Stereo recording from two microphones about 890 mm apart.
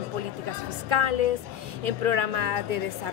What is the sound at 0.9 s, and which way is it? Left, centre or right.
A woman's voice, right.